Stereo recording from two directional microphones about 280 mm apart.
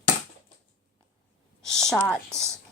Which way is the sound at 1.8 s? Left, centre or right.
Centre.